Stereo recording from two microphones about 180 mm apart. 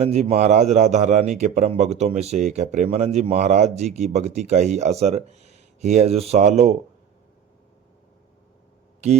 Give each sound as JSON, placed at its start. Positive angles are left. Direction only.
{"t": 0.0, "sound": "a man's voice", "side_deg": -35}